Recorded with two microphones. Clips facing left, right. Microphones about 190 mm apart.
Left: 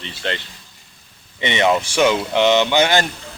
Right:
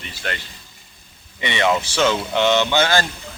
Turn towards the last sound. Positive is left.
turn(degrees=15)  # may be behind; listen again after turning